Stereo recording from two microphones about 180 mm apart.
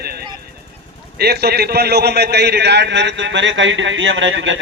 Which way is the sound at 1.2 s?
60° right (ahead or behind).